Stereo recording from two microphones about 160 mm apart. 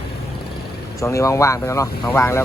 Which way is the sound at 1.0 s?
20° left (ahead or behind).